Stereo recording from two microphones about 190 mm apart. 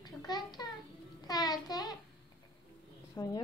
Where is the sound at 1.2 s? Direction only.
20° left (ahead or behind).